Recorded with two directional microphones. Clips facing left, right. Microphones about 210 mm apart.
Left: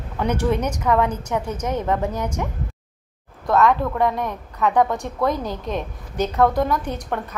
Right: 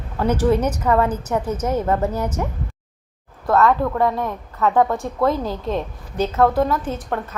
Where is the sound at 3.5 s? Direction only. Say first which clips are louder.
Right 1 dB; 15° left (ahead or behind).